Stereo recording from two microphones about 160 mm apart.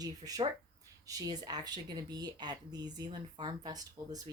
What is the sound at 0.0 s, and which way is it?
Speech, 25° right (ahead or behind).